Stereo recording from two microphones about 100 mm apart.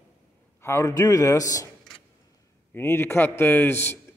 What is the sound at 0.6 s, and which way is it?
A man's voice, 25° left (ahead or behind).